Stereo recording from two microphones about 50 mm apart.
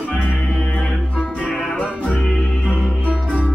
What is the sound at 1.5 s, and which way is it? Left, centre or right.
Music, left.